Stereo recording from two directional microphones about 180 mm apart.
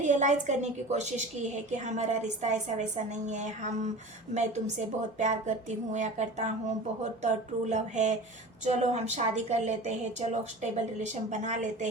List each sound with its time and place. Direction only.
0.0 s a woman's voice: 45° right (ahead or behind)
7.7 s a woman's voice: 40° right (ahead or behind)